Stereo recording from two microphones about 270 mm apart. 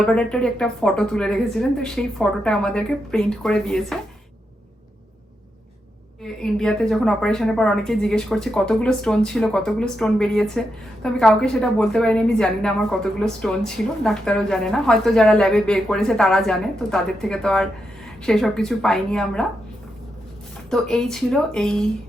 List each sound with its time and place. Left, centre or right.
0.0 s a woman's voice: centre
6.2 s a woman's voice: centre
20.7 s a woman's voice: centre